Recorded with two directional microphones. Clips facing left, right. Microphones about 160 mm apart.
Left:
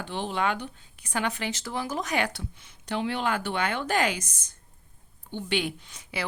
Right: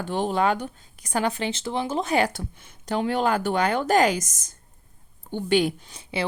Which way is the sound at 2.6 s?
45° right (ahead or behind).